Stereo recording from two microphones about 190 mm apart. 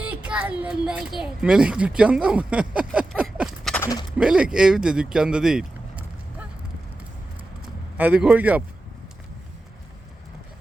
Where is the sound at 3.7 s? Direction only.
15° left (ahead or behind).